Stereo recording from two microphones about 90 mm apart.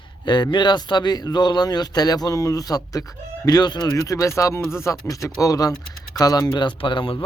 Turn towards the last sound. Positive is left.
turn(degrees=70)  # may be behind; listen again after turning